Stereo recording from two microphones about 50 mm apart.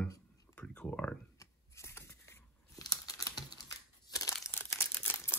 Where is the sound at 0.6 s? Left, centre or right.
Left.